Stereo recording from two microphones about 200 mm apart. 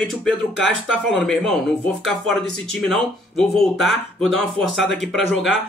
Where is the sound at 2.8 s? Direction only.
Centre (ahead or behind).